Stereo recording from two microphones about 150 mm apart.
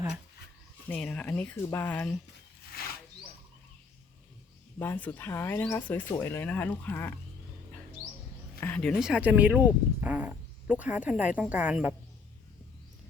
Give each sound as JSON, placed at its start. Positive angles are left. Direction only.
{"t": 0.9, "sound": "speech", "side_deg": 10}
{"t": 2.8, "sound": "wild animals", "side_deg": 90}
{"t": 4.8, "sound": "speech", "side_deg": 10}
{"t": 8.6, "sound": "speech", "side_deg": 5}